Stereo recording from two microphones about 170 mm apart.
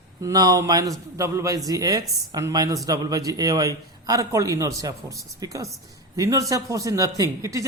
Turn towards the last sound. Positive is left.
turn(degrees=-20)  # may be behind; listen again after turning